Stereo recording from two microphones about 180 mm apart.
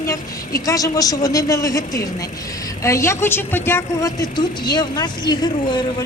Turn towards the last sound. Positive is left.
turn(degrees=25)  # may be behind; listen again after turning